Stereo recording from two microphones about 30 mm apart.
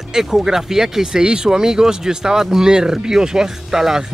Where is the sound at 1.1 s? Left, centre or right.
Right.